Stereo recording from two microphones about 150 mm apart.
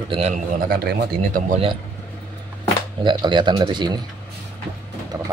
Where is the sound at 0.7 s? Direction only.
75° right (ahead or behind).